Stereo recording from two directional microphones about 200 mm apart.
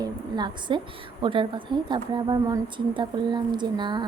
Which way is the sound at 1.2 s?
25° right (ahead or behind).